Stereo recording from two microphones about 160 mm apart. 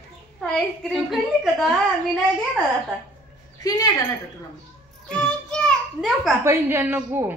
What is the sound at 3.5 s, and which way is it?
Speech, 20° left (ahead or behind).